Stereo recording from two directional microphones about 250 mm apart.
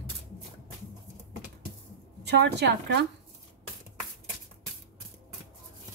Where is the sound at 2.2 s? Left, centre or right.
Right.